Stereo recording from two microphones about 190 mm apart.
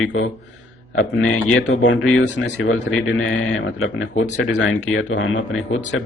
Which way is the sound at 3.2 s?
90° left.